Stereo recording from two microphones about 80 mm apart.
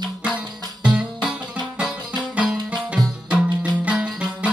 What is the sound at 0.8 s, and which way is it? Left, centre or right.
Music, centre.